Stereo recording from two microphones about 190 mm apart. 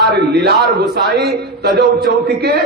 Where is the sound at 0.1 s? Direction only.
60° right (ahead or behind).